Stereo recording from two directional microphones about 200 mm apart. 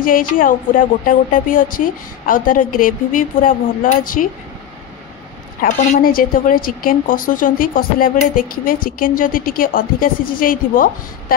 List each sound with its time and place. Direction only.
0.0 s a woman's voice: 45° left (ahead or behind)
5.6 s a woman's voice: 40° left (ahead or behind)